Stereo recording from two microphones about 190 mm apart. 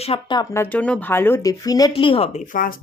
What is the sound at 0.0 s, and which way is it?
Speech, 25° left (ahead or behind).